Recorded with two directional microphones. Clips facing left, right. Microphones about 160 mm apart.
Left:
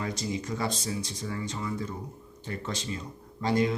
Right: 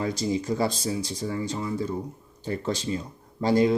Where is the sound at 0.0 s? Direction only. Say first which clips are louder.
Right 6 dB; 30° right (ahead or behind).